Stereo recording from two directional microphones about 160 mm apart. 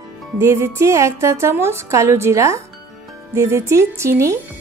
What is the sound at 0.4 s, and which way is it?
A woman's voice, 20° right (ahead or behind).